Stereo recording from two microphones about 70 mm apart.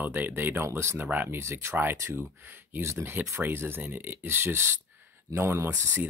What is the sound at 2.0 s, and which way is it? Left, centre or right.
Speech, right.